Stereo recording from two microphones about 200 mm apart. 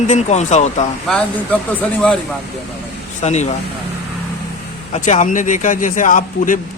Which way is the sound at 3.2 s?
35° left (ahead or behind).